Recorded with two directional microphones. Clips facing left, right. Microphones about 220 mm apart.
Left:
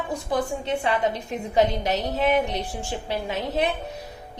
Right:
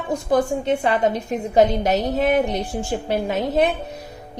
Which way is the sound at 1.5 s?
45° right (ahead or behind).